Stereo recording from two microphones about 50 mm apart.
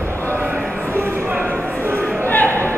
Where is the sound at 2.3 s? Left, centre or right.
Left.